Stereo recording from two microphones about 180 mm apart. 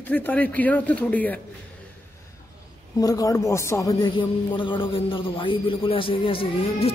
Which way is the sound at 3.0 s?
20° left (ahead or behind).